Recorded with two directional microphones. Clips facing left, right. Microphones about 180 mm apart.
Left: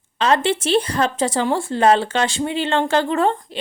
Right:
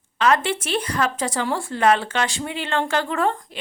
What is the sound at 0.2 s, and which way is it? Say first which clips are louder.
Speech: left 2 dB; 30° left (ahead or behind).